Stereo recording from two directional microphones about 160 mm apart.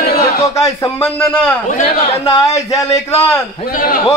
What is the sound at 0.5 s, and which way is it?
A man's voice, 20° left (ahead or behind).